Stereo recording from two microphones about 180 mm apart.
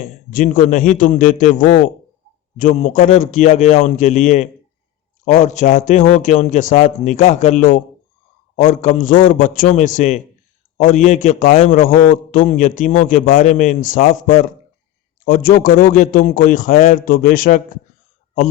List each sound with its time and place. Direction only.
0.3 s a man's voice: 45° left (ahead or behind)